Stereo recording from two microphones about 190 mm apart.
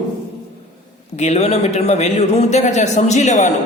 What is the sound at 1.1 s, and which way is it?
Speech, 35° left (ahead or behind).